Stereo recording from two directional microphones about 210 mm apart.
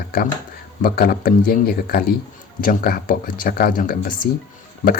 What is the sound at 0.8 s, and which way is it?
Speech, 45° left (ahead or behind).